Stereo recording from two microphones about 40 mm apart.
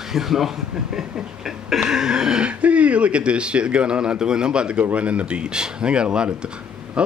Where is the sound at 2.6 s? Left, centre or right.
Right.